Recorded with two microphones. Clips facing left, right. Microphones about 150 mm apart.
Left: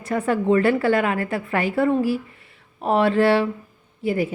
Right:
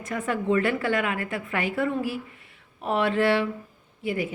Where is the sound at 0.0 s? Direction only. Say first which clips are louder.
Left 6 dB; 35° left (ahead or behind).